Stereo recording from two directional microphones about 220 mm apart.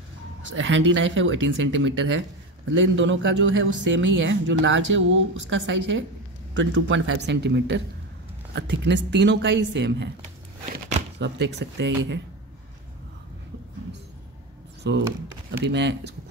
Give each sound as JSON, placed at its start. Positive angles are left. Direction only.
{"t": 0.5, "sound": "a woman's voice", "side_deg": -60}
{"t": 10.6, "sound": "a sound", "side_deg": -30}
{"t": 11.1, "sound": "a woman's voice", "side_deg": -50}
{"t": 14.8, "sound": "a woman's voice", "side_deg": -50}